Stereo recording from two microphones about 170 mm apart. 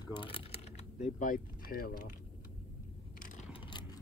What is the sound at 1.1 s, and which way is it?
Speech, 55° left (ahead or behind).